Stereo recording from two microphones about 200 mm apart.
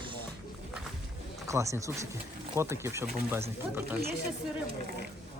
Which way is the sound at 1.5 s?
15° right (ahead or behind).